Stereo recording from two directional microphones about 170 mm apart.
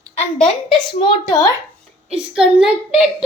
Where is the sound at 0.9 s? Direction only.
30° left (ahead or behind).